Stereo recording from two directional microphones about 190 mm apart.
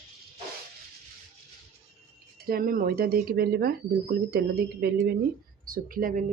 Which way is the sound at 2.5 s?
50° right (ahead or behind).